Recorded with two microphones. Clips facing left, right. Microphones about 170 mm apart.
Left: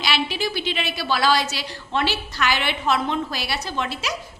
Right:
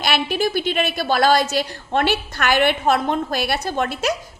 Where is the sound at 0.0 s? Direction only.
50° right (ahead or behind).